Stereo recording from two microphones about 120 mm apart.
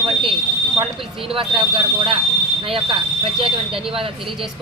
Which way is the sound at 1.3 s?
45° right (ahead or behind).